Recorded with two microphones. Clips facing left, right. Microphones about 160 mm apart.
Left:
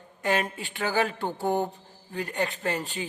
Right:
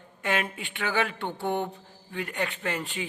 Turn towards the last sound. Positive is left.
turn(degrees=35)  # may be behind; listen again after turning